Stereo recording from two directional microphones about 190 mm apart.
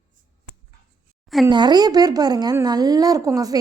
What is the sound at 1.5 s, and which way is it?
A woman's voice, 25° right (ahead or behind).